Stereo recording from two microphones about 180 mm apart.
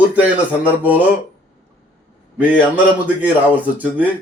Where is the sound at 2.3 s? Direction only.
10° right (ahead or behind).